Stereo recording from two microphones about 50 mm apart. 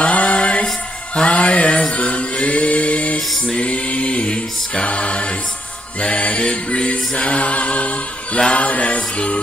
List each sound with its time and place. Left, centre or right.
0.0 s music: left
3.4 s a capella: left